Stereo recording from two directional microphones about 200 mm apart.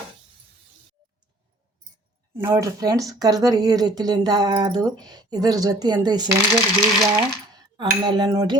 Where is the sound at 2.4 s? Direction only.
15° right (ahead or behind).